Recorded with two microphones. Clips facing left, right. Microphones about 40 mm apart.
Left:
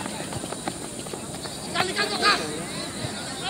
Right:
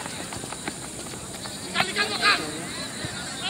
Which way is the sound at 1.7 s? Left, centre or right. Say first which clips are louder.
Even; right.